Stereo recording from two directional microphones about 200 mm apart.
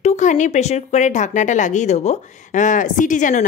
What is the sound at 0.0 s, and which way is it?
Speech, 35° left (ahead or behind).